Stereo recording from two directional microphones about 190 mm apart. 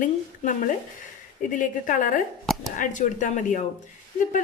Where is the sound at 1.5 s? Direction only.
45° left (ahead or behind).